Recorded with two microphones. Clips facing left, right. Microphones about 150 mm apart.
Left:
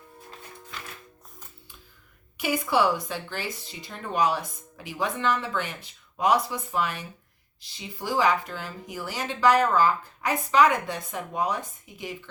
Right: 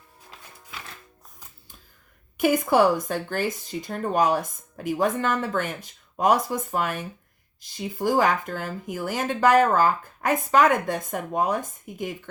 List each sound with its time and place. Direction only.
2.4 s speech: 50° right (ahead or behind)